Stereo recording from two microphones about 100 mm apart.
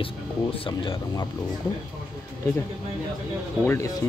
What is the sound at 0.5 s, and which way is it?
Speech, 60° left (ahead or behind).